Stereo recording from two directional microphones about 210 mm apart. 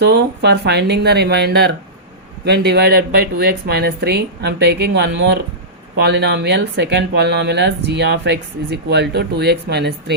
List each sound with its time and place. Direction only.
0.0 s speech: 50° right (ahead or behind)